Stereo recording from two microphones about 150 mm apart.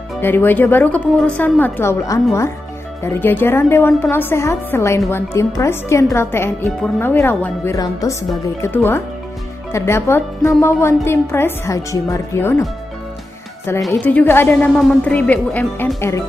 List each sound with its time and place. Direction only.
0.2 s a woman's voice: 15° left (ahead or behind)
13.7 s a woman's voice: 15° left (ahead or behind)